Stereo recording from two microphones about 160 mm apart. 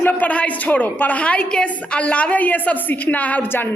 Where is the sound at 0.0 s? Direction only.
10° left (ahead or behind).